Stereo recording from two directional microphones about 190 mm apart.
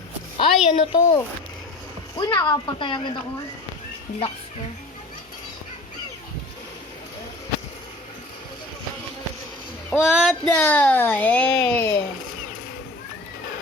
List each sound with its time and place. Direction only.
0.3 s a woman's voice: 30° left (ahead or behind)
10.0 s speech: centre (ahead or behind)